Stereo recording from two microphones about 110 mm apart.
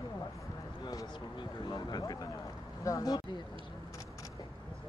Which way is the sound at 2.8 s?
35° left (ahead or behind).